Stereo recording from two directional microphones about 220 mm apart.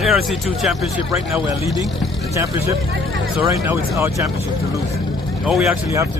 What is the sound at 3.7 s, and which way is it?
Speech, 10° right (ahead or behind).